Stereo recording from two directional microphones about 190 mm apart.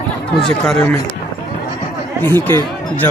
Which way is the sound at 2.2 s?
10° left (ahead or behind).